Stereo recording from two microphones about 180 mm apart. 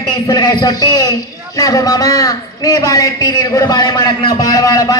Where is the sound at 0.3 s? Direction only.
20° left (ahead or behind).